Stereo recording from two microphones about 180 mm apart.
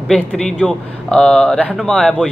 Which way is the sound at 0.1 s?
5° left (ahead or behind).